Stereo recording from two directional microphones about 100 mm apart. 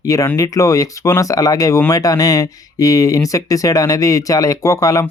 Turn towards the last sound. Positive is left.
turn(degrees=35)  # may be behind; listen again after turning